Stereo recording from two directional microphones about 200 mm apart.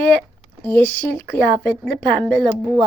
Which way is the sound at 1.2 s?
55° left (ahead or behind).